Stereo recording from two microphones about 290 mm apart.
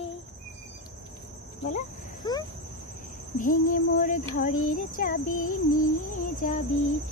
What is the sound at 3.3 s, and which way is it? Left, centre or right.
Speech, left.